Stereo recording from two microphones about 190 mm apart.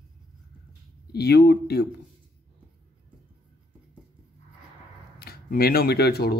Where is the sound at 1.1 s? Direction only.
60° left (ahead or behind).